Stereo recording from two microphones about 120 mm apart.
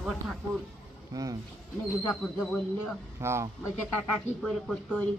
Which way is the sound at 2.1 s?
5° left (ahead or behind).